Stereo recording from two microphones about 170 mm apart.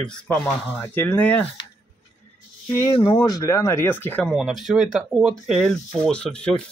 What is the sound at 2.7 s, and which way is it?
Speech, 15° left (ahead or behind).